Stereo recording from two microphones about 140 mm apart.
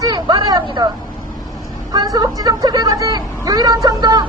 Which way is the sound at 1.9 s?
25° right (ahead or behind).